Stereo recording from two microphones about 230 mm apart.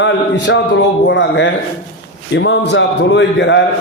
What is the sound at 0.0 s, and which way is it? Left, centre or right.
A man's voice, left.